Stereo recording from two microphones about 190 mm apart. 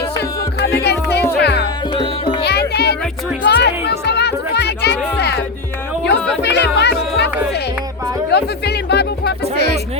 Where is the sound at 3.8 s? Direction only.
60° left (ahead or behind).